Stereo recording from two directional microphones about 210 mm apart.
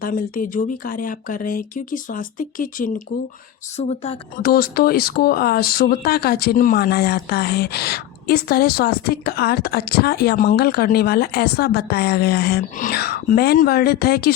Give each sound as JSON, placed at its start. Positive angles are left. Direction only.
{"t": 0.0, "sound": "speech", "side_deg": 40}
{"t": 4.4, "sound": "speech", "side_deg": 45}